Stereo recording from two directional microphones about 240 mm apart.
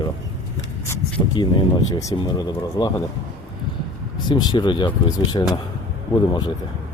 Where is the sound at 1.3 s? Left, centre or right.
Centre.